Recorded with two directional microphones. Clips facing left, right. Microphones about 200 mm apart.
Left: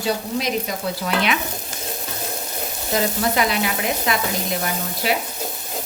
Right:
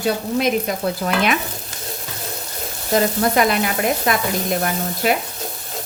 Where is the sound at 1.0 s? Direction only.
50° right (ahead or behind).